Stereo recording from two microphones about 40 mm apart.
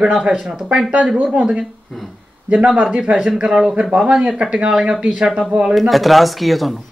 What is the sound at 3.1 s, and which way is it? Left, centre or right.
Speech, centre.